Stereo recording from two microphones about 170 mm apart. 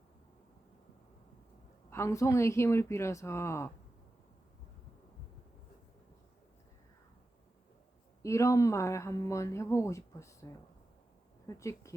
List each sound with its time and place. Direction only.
1.9 s speech: 15° left (ahead or behind)
8.2 s speech: 15° left (ahead or behind)
11.4 s speech: 15° left (ahead or behind)